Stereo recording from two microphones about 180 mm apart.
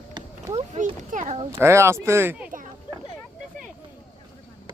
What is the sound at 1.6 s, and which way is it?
Speech, 15° right (ahead or behind).